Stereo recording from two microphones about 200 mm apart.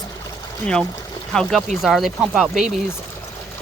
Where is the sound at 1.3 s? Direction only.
Centre (ahead or behind).